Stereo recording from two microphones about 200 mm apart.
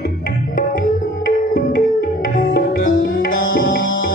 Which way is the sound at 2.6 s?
45° left (ahead or behind).